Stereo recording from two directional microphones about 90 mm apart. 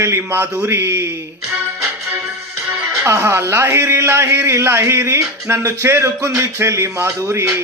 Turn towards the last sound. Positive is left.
turn(degrees=-30)  # may be behind; listen again after turning